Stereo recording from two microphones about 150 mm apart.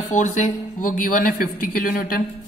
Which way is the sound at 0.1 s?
55° left (ahead or behind).